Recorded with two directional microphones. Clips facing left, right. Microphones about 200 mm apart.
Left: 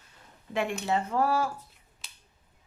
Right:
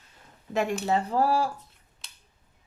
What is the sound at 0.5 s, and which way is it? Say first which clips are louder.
Speech: right 3 dB; 35° right (ahead or behind).